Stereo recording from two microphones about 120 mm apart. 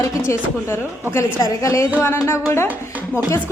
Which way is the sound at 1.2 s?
25° left (ahead or behind).